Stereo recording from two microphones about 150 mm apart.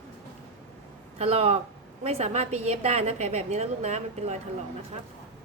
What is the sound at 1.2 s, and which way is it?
A woman's voice, 40° right (ahead or behind).